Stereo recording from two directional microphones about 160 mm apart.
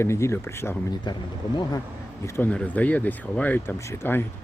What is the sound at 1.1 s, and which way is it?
Speech, 25° left (ahead or behind).